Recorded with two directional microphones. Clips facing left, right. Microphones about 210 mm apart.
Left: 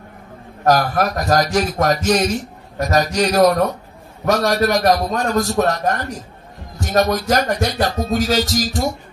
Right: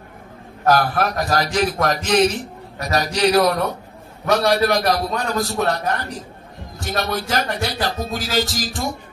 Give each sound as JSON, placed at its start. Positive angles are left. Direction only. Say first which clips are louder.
{"t": 0.7, "sound": "a man's voice", "louder": "left 2 dB", "side_deg": 45}